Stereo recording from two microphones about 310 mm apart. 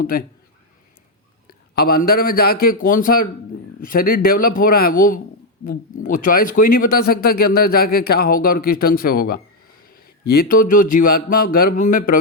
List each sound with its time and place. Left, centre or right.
0.0 s speech: left
1.5 s a sound: left
2.0 s a man's voice: left